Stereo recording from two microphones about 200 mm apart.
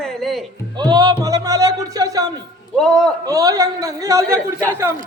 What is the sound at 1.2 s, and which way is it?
Music, 15° right (ahead or behind).